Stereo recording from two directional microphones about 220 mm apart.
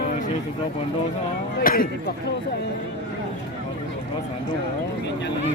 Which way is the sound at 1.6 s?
40° left (ahead or behind).